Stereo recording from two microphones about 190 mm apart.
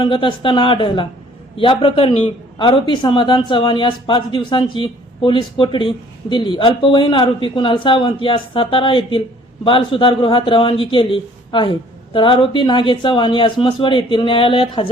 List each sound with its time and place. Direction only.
0.0 s a man's voice: 25° left (ahead or behind)